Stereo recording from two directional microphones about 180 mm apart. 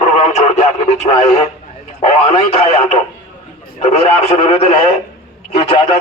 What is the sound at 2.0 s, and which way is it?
Speech, 40° left (ahead or behind).